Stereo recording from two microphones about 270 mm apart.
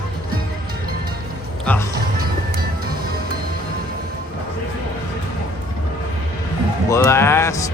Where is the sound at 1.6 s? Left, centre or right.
Centre.